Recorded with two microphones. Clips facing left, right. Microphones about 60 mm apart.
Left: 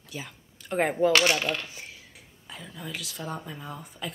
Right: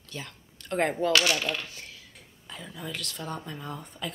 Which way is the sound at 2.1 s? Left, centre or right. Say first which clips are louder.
Even; centre.